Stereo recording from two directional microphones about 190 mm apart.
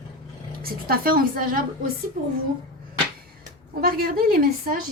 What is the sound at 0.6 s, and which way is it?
Speech, 50° right (ahead or behind).